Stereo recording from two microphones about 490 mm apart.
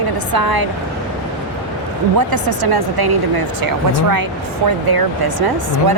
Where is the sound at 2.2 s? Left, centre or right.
Right.